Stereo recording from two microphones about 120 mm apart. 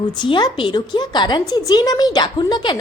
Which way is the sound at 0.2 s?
40° left (ahead or behind).